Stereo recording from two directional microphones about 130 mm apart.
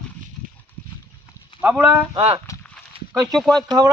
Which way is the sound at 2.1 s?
50° right (ahead or behind).